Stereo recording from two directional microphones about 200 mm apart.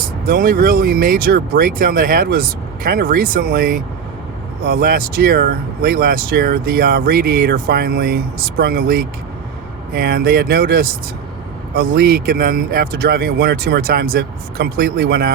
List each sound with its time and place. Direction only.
0.3 s speech: 45° right (ahead or behind)